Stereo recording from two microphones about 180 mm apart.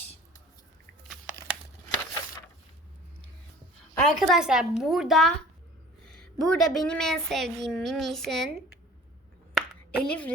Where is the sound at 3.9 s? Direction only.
Centre (ahead or behind).